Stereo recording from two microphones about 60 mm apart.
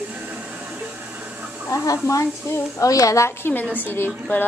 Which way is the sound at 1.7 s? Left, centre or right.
Left.